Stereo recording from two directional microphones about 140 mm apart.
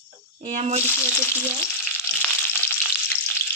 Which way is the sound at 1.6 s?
15° left (ahead or behind).